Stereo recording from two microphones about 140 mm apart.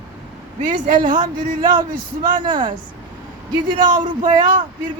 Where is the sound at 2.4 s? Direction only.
35° right (ahead or behind).